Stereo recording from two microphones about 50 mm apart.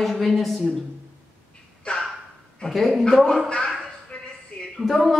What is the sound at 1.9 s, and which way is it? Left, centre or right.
Speech, left.